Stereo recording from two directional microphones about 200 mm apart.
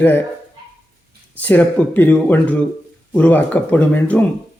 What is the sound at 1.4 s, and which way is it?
Speech, 10° left (ahead or behind).